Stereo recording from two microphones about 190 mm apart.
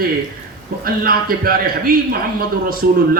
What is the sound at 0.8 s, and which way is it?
A man's voice, 50° right (ahead or behind).